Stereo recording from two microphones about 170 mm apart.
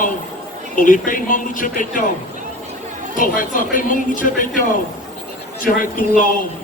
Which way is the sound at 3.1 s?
50° left (ahead or behind).